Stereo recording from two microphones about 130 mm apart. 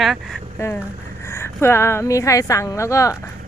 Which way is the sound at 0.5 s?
15° left (ahead or behind).